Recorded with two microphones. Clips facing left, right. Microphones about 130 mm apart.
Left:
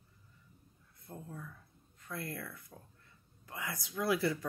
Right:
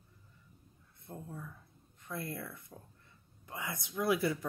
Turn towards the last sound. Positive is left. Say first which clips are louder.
# right 1 dB
turn(degrees=-20)  # may be behind; listen again after turning